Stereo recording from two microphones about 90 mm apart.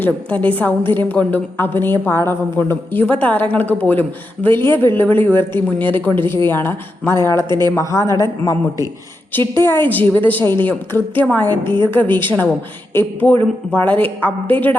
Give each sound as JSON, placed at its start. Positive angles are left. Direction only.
{"t": 0.0, "sound": "a woman's voice", "side_deg": 15}
{"t": 7.4, "sound": "a woman's voice", "side_deg": -50}
{"t": 7.8, "sound": "a woman's voice", "side_deg": 35}
{"t": 9.6, "sound": "a woman's voice", "side_deg": 25}